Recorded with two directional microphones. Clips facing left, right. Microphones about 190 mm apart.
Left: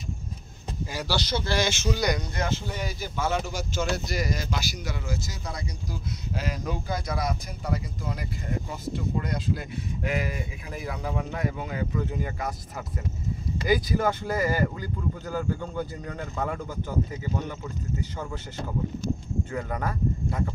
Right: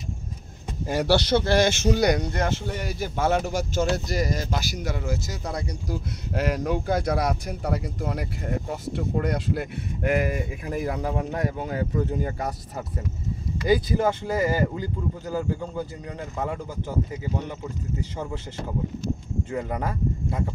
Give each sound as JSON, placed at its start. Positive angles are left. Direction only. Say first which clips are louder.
{"t": 0.8, "sound": "speech", "louder": "right 9 dB", "side_deg": -60}
{"t": 16.3, "sound": "speech", "louder": "right 1 dB", "side_deg": -20}
{"t": 19.5, "sound": "speech", "louder": "right 3 dB", "side_deg": -20}